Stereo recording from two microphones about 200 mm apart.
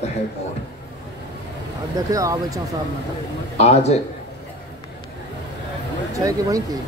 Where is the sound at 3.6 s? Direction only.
30° left (ahead or behind).